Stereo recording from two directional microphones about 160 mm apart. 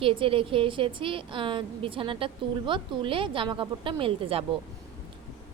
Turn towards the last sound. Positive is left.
turn(degrees=-35)  # may be behind; listen again after turning